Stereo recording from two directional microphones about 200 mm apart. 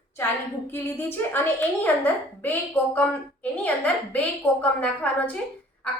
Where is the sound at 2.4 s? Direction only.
10° left (ahead or behind).